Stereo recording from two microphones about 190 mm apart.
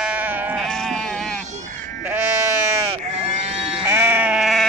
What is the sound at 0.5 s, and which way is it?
Sheep, centre (ahead or behind).